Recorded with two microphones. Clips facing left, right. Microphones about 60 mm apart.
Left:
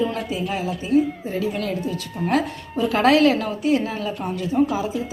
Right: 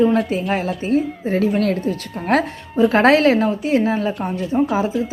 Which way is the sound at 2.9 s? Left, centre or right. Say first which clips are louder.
Right 2 dB; right.